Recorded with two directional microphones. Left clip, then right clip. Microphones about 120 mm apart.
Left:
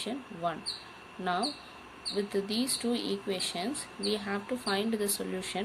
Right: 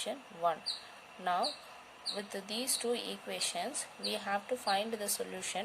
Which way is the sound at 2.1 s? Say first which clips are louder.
Left 10 dB; 75° right (ahead or behind).